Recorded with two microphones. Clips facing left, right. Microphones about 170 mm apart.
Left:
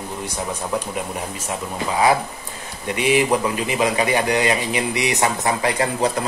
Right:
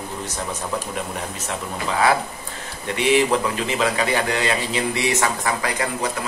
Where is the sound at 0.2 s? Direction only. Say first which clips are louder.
Left 3 dB; 10° left (ahead or behind).